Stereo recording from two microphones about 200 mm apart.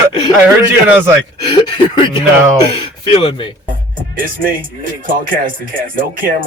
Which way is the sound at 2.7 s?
30° left (ahead or behind).